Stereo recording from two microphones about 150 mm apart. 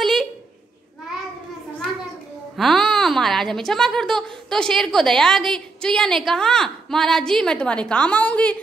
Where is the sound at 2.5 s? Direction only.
Centre (ahead or behind).